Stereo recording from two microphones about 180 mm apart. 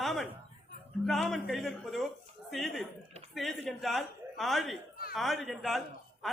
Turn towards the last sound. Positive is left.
turn(degrees=0)  # may be behind; listen again after turning